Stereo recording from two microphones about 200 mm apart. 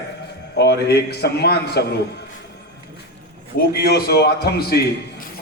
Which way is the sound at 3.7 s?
50° left (ahead or behind).